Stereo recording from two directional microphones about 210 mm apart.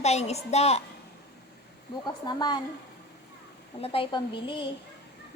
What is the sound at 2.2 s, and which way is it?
Speech, 20° left (ahead or behind).